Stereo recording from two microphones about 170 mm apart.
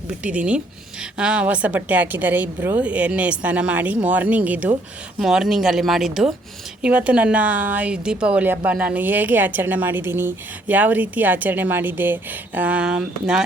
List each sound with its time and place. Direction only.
0.1 s a woman's voice: 5° right (ahead or behind)